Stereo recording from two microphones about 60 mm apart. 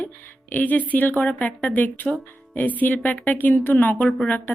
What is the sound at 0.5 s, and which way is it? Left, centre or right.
A woman's voice, left.